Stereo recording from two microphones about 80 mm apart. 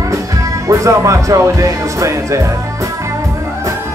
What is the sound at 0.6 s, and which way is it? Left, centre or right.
Speech, right.